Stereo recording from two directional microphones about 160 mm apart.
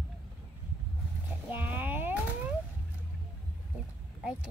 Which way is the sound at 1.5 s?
10° right (ahead or behind).